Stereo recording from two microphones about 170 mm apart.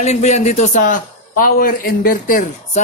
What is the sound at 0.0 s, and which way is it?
A man's voice, 40° left (ahead or behind).